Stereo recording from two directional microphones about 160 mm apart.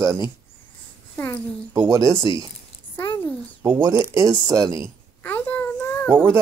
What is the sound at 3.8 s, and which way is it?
Speech, 25° right (ahead or behind).